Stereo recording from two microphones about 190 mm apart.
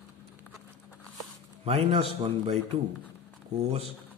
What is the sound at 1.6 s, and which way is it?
Speech, 30° right (ahead or behind).